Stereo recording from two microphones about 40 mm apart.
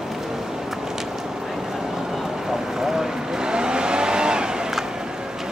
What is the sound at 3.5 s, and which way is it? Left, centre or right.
Vehicle, right.